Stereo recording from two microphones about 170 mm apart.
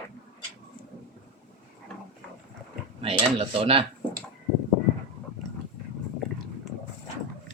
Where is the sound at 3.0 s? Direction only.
35° right (ahead or behind).